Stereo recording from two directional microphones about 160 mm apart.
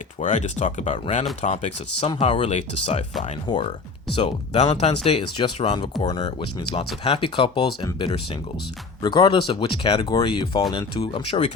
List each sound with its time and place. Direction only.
0.3 s speech: 50° left (ahead or behind)
3.4 s speech: 30° left (ahead or behind)
4.1 s speech: 45° left (ahead or behind); by 6.1 s 25° left (ahead or behind)
6.1 s speech: 40° left (ahead or behind)